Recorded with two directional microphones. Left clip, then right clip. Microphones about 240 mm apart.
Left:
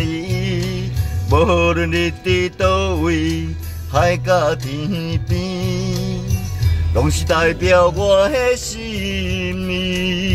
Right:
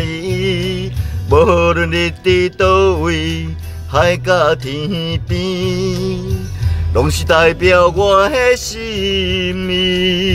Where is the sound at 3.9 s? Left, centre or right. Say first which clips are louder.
Right 3 dB; right.